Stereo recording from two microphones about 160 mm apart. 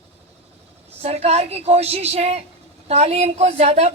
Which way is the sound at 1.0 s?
40° right (ahead or behind).